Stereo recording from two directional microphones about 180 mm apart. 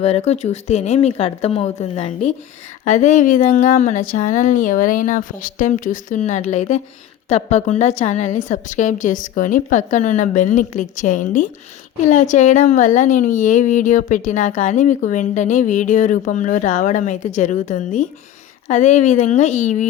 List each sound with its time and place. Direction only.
0.0 s a woman's voice: 35° left (ahead or behind)